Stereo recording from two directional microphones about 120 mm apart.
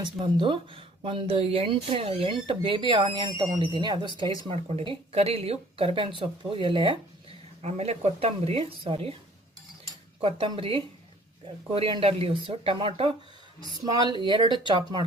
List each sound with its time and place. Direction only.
0.0 s speech: 40° right (ahead or behind)
4.4 s speech: 55° right (ahead or behind)
7.6 s speech: 60° right (ahead or behind)
10.2 s speech: 50° right (ahead or behind)
13.8 s speech: 35° right (ahead or behind)